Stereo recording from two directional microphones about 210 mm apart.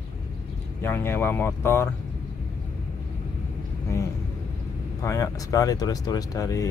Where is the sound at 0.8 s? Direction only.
10° left (ahead or behind).